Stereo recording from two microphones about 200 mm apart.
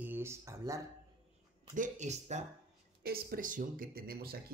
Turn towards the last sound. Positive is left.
turn(degrees=-50)  # may be behind; listen again after turning